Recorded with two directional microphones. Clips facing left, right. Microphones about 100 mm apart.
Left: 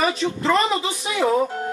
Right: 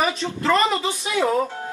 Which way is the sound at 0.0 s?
Centre (ahead or behind).